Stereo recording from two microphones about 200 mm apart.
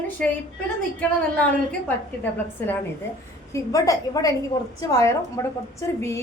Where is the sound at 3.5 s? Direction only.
15° left (ahead or behind).